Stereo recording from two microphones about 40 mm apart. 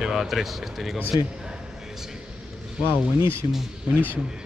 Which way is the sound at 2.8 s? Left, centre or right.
Right.